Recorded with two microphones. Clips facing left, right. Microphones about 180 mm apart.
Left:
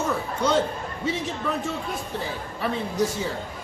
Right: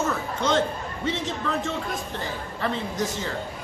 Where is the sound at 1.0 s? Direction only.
10° left (ahead or behind).